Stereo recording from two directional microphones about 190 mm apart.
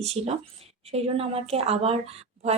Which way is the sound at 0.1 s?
30° right (ahead or behind).